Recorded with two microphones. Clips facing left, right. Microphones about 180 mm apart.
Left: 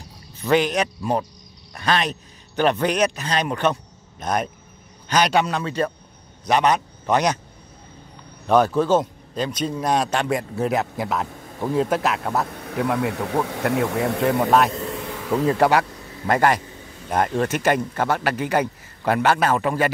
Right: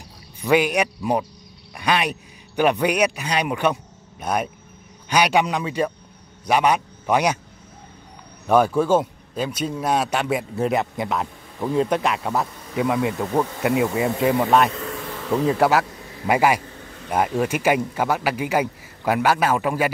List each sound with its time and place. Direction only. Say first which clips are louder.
0.4 s a man's voice: right 1 dB; 10° right (ahead or behind)
8.5 s a man's voice: even; 10° right (ahead or behind)